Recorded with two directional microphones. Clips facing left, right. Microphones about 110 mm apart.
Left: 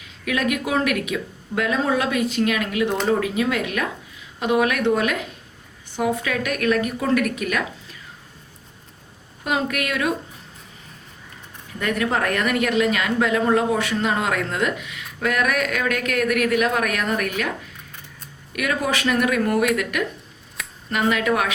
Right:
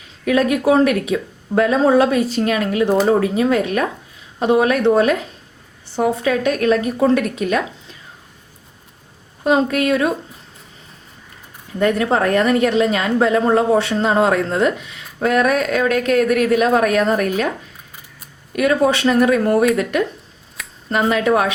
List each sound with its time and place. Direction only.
0.3 s a woman's voice: 35° right (ahead or behind)
9.4 s a woman's voice: 30° right (ahead or behind)
11.8 s a woman's voice: 30° right (ahead or behind)
18.5 s a woman's voice: 30° right (ahead or behind)
20.6 s a sound: centre (ahead or behind)
20.9 s a woman's voice: 30° right (ahead or behind)